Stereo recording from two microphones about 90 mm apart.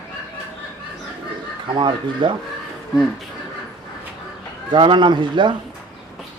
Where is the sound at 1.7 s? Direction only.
60° right (ahead or behind).